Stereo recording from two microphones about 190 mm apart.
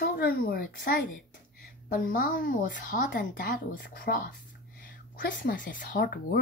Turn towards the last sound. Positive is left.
turn(degrees=50)  # may be behind; listen again after turning